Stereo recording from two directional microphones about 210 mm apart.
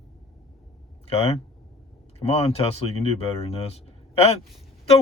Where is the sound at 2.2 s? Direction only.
30° left (ahead or behind).